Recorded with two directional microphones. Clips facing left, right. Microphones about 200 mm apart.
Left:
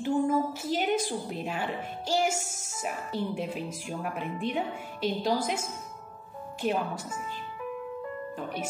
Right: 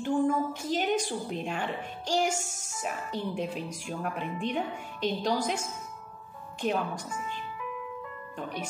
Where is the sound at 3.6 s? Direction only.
5° left (ahead or behind).